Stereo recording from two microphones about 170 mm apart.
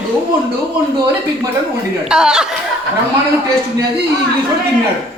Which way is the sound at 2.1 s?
5° right (ahead or behind).